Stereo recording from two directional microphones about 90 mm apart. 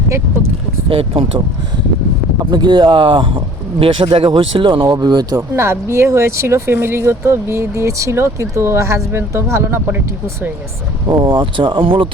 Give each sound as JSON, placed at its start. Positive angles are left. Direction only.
{"t": 0.9, "sound": "speech", "side_deg": -90}
{"t": 2.5, "sound": "speech", "side_deg": -55}
{"t": 5.4, "sound": "speech", "side_deg": -30}
{"t": 11.1, "sound": "speech", "side_deg": -60}